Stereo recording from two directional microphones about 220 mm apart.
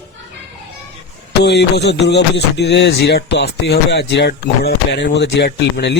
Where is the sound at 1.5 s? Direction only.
50° left (ahead or behind).